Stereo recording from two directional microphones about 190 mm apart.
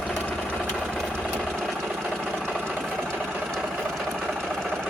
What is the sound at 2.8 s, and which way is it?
Sewing machine, 5° left (ahead or behind).